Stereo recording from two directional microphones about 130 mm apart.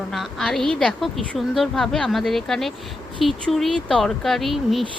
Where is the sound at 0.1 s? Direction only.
Centre (ahead or behind).